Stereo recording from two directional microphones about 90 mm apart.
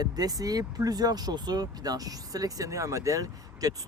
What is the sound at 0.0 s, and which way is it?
Speech, 45° right (ahead or behind).